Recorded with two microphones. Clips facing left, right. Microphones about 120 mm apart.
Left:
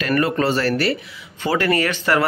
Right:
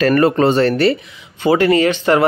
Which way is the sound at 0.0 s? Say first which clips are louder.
Right 7 dB; 30° right (ahead or behind).